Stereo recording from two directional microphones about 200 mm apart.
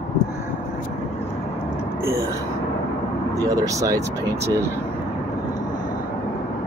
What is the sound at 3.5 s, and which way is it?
Speech, 15° right (ahead or behind).